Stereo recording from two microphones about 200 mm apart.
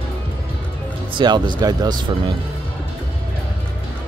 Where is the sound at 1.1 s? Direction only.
20° right (ahead or behind).